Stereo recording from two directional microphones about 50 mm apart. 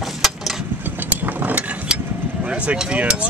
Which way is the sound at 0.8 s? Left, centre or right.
Right.